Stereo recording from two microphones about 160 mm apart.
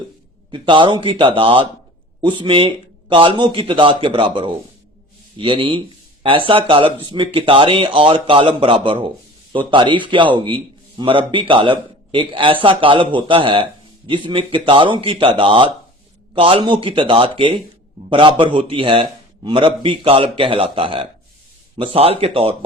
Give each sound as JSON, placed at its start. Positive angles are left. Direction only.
{"t": 0.5, "sound": "speech", "side_deg": -30}